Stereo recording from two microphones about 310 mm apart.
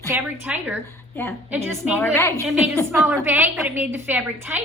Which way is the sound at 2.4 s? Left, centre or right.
Centre.